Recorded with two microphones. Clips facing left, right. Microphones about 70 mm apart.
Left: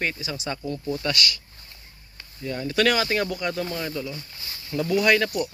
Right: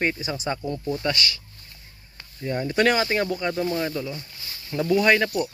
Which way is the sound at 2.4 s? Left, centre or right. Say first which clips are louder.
Right 1 dB; right.